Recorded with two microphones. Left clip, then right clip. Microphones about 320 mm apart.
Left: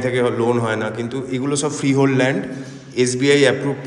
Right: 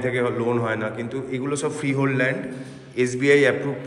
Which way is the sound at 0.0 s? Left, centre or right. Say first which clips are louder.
Left 5 dB; centre.